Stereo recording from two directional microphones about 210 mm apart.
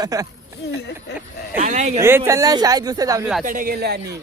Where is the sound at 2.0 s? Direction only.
10° right (ahead or behind).